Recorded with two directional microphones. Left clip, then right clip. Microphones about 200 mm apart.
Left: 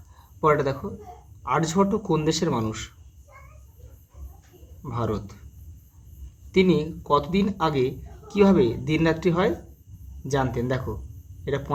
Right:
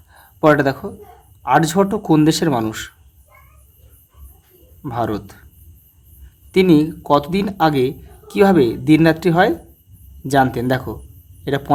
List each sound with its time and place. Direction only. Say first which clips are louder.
0.1 s a sound: right 7 dB; 45° right (ahead or behind)
1.4 s speech: right 8 dB; 45° right (ahead or behind)
4.8 s speech: right 7 dB; 50° right (ahead or behind)
6.5 s speech: right 8 dB; 50° right (ahead or behind)